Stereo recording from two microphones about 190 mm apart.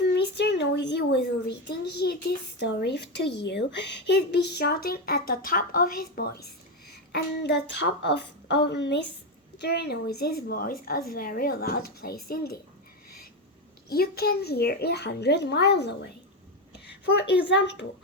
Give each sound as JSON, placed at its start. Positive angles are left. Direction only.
{"t": 0.1, "sound": "a sound", "side_deg": 65}
{"t": 2.6, "sound": "a woman's voice", "side_deg": 65}
{"t": 13.9, "sound": "speech", "side_deg": 55}
{"t": 17.4, "sound": "speech", "side_deg": 65}